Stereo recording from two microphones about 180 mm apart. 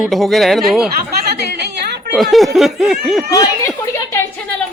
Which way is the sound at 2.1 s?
Centre (ahead or behind).